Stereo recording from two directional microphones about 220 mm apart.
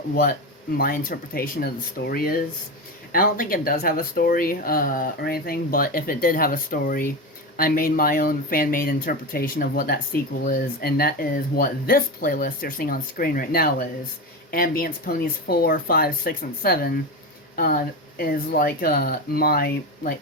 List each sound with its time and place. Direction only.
0.1 s speech: 40° left (ahead or behind)